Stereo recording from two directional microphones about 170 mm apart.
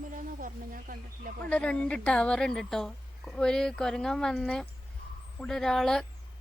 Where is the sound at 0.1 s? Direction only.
50° right (ahead or behind).